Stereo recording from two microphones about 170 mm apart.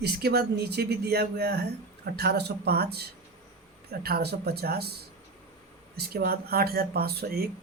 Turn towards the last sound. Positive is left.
turn(degrees=-65)  # may be behind; listen again after turning